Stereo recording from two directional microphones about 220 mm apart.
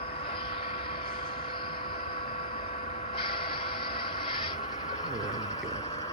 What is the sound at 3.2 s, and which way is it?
Vehicle, 25° left (ahead or behind).